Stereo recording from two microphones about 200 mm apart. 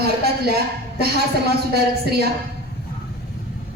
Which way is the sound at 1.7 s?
55° right (ahead or behind).